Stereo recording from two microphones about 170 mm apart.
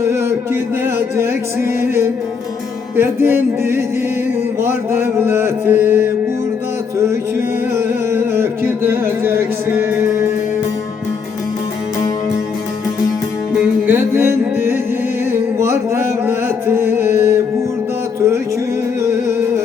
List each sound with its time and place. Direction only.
0.0 s a sound: 15° right (ahead or behind)
0.9 s mantra: 15° right (ahead or behind)
7.7 s music: 15° right (ahead or behind)
13.8 s music: 15° right (ahead or behind)
15.3 s a sound: 15° right (ahead or behind)
16.2 s music: 15° right (ahead or behind)